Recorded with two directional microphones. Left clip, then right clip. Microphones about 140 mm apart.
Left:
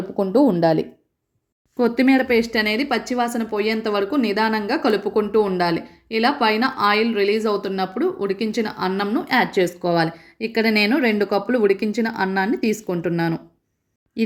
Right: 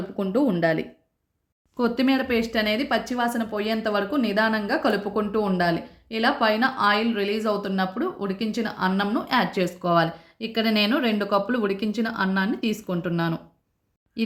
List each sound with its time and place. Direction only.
0.2 s speech: 20° left (ahead or behind)